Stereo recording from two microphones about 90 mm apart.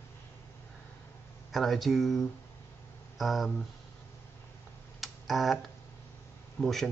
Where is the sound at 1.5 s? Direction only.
Centre (ahead or behind).